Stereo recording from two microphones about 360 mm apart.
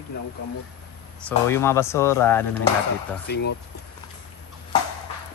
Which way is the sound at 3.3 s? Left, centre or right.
Left.